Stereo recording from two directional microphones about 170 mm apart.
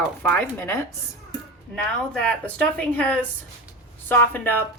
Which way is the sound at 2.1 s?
5° left (ahead or behind).